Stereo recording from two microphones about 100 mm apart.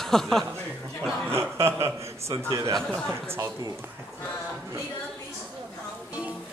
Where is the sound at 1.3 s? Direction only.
30° right (ahead or behind).